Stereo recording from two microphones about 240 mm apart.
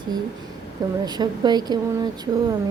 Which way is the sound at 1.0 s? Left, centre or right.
Centre.